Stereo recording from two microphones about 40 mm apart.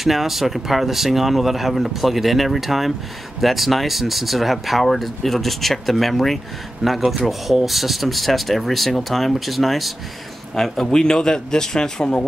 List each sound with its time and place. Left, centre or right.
0.0 s speech: centre
10.5 s a man's voice: centre